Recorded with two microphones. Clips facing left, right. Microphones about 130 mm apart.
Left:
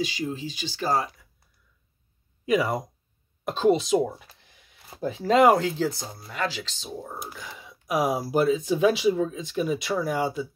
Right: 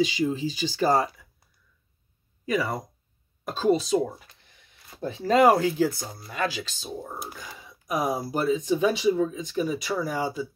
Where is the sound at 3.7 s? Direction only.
90° left.